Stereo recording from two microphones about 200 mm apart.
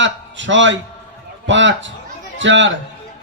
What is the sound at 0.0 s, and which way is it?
A man's voice, 65° right (ahead or behind).